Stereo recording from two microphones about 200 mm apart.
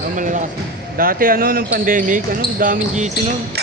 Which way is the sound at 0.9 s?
45° right (ahead or behind).